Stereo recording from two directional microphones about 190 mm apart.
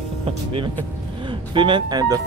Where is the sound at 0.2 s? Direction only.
30° right (ahead or behind).